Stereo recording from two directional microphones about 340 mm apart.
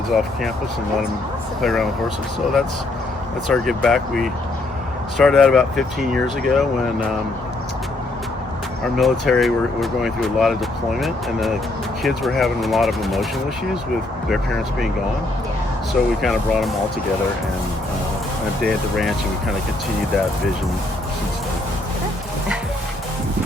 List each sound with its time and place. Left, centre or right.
0.1 s speech: centre
1.6 s speech: centre
3.5 s speech: centre
8.8 s speech: centre
14.3 s speech: centre
15.9 s speech: centre
18.6 s speech: centre